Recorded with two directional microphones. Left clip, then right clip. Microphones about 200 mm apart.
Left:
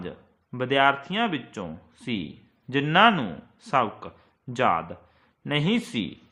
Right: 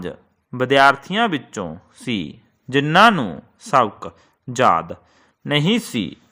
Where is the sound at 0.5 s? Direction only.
40° right (ahead or behind).